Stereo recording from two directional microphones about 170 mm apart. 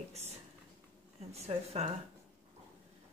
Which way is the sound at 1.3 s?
40° right (ahead or behind).